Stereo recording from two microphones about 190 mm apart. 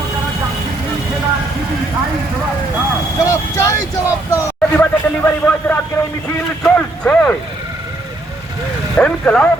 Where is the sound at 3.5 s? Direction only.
15° left (ahead or behind).